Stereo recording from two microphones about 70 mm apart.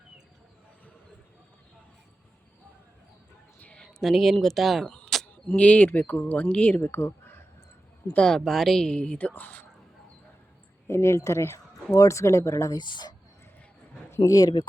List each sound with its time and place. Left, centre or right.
3.6 s a sound: centre
4.0 s speech: centre
5.1 s a sound: centre
5.5 s speech: centre; by 7.4 s left
8.1 s speech: centre
10.8 s speech: left
12.7 s speech: left
14.2 s speech: left